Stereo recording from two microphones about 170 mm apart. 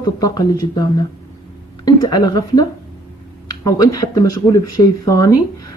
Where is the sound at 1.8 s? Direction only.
25° left (ahead or behind).